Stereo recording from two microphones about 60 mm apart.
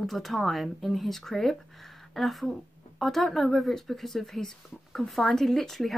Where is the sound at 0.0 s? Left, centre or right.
Centre.